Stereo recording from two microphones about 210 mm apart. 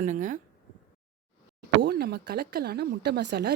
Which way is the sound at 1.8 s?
50° right (ahead or behind).